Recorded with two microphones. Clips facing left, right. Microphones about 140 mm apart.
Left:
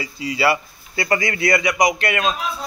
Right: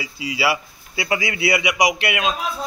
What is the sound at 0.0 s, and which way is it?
A man's voice, 5° right (ahead or behind).